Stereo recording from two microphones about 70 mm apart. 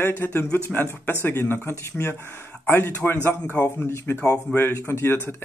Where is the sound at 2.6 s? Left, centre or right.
Left.